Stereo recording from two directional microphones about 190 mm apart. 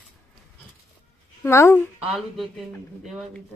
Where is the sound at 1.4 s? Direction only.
15° left (ahead or behind).